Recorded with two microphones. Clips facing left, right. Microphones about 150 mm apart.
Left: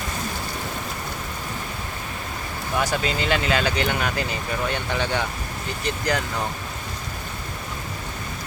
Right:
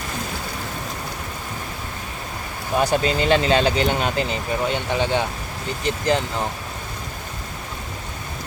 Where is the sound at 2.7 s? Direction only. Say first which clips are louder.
Right 5 dB; 25° right (ahead or behind).